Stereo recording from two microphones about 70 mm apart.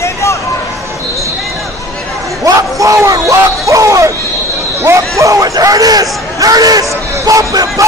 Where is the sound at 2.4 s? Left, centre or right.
Right.